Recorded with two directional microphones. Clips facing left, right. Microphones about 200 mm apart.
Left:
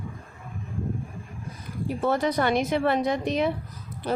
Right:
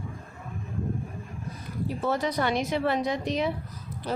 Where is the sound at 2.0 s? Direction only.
55° left (ahead or behind).